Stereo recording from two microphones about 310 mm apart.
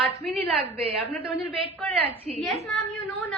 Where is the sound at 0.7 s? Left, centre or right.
Centre.